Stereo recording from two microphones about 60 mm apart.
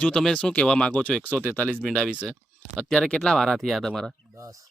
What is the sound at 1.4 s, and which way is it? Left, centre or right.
Speech, left.